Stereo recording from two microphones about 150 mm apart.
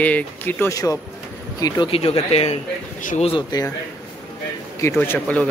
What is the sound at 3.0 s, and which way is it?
Speech, 60° left (ahead or behind).